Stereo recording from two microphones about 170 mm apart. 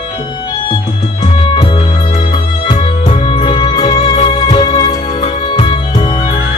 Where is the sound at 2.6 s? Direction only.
30° left (ahead or behind).